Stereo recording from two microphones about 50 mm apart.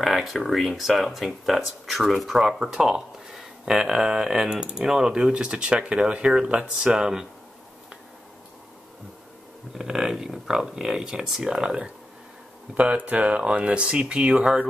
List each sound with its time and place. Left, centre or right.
0.0 s speech: centre
9.8 s speech: centre
12.7 s speech: right